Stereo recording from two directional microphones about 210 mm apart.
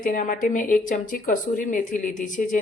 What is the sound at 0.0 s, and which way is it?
A woman's voice, 40° left (ahead or behind).